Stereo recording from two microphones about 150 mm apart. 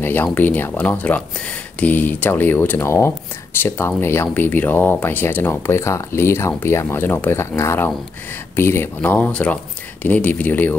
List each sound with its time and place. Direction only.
0.0 s speech: 10° left (ahead or behind)